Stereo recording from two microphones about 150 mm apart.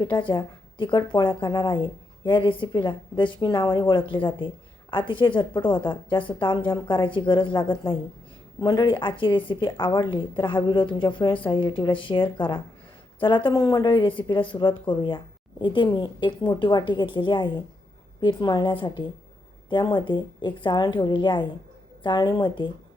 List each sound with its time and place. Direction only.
0.0 s a woman's voice: 30° left (ahead or behind)